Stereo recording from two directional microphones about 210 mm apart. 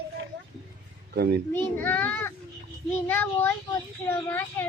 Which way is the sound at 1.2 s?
50° right (ahead or behind).